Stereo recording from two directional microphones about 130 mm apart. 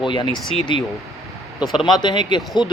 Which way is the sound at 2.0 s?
35° left (ahead or behind).